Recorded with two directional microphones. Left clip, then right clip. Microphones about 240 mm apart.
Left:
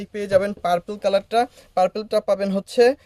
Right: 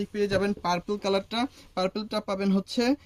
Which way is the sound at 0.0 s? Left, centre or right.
Left.